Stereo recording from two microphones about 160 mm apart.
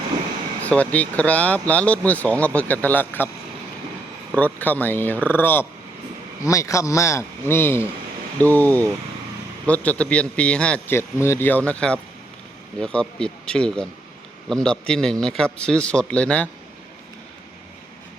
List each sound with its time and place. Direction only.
0.6 s a man's voice: 10° left (ahead or behind)
4.4 s a man's voice: 10° left (ahead or behind)